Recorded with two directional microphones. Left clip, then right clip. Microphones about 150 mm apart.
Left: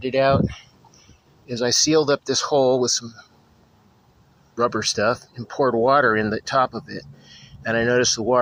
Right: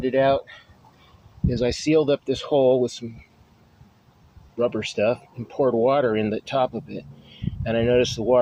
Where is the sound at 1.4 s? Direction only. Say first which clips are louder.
Left 4 dB; 65° left (ahead or behind).